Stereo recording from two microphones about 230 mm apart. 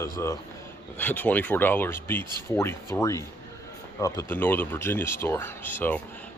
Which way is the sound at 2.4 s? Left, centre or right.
Centre.